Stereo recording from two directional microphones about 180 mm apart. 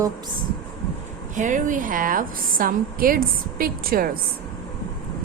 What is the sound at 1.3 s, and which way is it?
A woman's voice, 45° right (ahead or behind).